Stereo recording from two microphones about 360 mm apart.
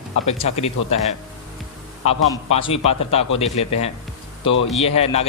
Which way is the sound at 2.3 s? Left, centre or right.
Centre.